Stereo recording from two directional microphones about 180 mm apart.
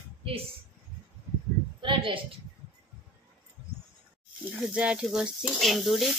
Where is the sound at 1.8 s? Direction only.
30° right (ahead or behind).